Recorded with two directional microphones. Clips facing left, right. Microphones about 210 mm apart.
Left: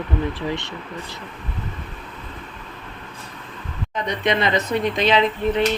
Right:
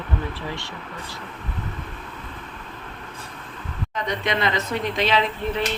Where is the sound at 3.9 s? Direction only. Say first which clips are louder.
Left 4 dB; 20° left (ahead or behind).